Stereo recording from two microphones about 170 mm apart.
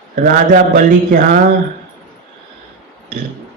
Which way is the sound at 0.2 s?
55° right (ahead or behind).